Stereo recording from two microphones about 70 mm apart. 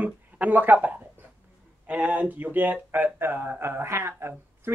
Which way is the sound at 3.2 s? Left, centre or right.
Right.